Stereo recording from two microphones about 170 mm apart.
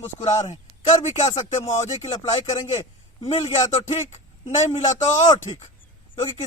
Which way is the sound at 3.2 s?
40° left (ahead or behind).